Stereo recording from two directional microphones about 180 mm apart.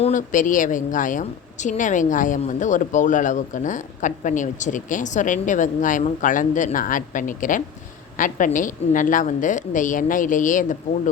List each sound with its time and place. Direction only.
0.0 s a woman's voice: 45° left (ahead or behind)